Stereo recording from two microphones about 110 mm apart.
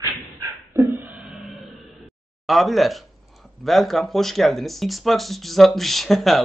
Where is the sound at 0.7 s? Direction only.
20° right (ahead or behind).